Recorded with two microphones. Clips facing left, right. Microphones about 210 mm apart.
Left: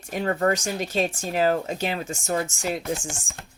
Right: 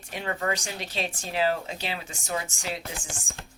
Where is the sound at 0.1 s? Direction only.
45° left (ahead or behind).